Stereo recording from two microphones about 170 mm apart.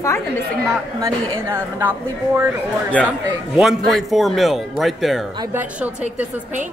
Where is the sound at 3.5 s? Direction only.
Centre (ahead or behind).